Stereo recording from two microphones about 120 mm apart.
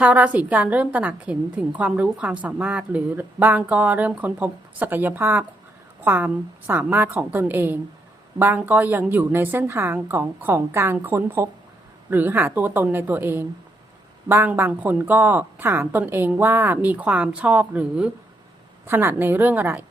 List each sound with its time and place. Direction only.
0.0 s a woman's voice: 10° right (ahead or behind)